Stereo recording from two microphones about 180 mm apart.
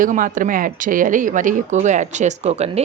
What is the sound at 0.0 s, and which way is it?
A man's voice, 50° right (ahead or behind).